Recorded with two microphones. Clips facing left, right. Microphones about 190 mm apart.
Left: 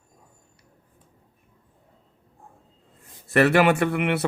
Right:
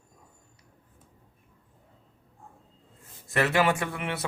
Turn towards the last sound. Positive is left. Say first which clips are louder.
# left 9 dB
turn(degrees=65)  # may be behind; listen again after turning